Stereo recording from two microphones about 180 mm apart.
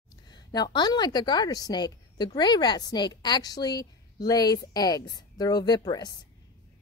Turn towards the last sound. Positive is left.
turn(degrees=25)  # may be behind; listen again after turning